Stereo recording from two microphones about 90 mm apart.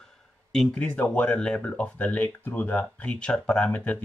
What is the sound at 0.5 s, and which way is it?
Speech, 5° left (ahead or behind).